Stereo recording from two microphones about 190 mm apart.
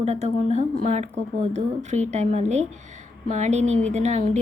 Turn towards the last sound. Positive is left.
turn(degrees=-35)  # may be behind; listen again after turning